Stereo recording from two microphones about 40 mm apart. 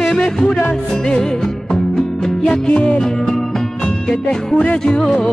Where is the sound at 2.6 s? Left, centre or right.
Left.